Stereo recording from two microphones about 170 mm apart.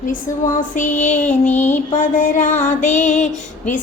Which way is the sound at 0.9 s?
45° left (ahead or behind).